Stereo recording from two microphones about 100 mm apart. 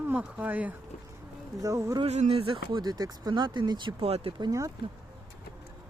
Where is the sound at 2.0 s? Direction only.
85° right; by 2.8 s 65° right (ahead or behind).